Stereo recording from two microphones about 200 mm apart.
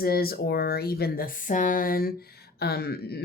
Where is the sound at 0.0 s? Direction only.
50° left (ahead or behind).